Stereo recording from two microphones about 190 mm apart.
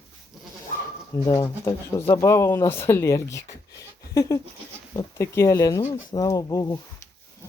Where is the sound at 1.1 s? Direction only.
15° left (ahead or behind).